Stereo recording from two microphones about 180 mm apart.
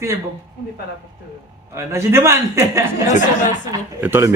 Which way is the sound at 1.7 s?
15° right (ahead or behind).